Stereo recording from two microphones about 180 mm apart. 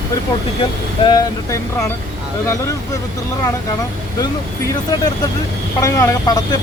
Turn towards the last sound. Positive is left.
turn(degrees=20)  # may be behind; listen again after turning